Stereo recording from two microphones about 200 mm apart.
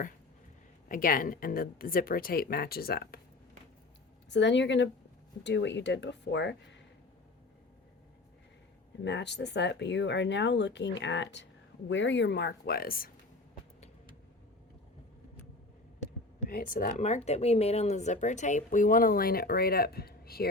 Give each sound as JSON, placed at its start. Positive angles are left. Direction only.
{"t": 0.9, "sound": "speech", "side_deg": 45}
{"t": 4.3, "sound": "speech", "side_deg": 60}
{"t": 9.0, "sound": "speech", "side_deg": 60}
{"t": 16.4, "sound": "speech", "side_deg": 45}